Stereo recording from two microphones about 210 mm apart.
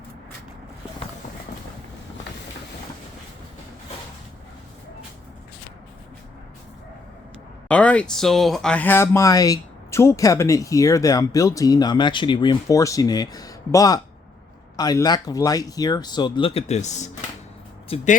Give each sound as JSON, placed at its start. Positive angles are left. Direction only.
{"t": 7.7, "sound": "speech", "side_deg": 5}